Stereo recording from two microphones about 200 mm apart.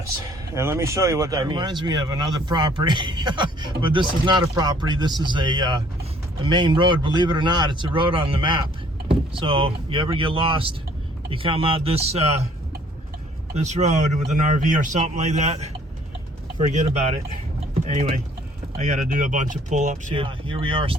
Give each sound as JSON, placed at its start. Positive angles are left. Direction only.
{"t": 0.5, "sound": "speech", "side_deg": -15}
{"t": 13.5, "sound": "a man's voice", "side_deg": -35}
{"t": 20.1, "sound": "speech", "side_deg": -25}